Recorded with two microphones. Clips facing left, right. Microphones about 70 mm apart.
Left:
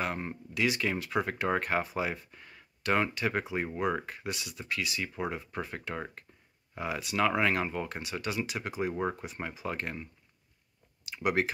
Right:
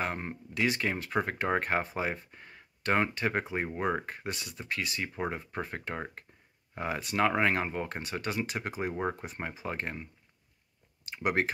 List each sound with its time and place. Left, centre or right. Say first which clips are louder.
0.0 s speech: even; right
4.0 s speech: even; right
11.1 s speech: even; right